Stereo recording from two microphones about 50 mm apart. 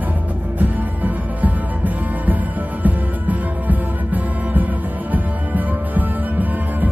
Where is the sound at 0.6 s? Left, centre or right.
Right.